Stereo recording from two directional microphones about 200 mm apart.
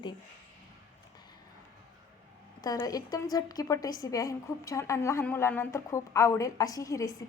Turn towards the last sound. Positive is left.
turn(degrees=15)  # may be behind; listen again after turning